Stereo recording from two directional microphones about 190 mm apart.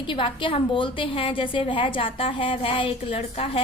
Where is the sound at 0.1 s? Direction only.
25° left (ahead or behind).